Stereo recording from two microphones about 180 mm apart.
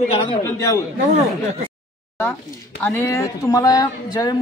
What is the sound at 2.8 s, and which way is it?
A woman's voice, 15° left (ahead or behind).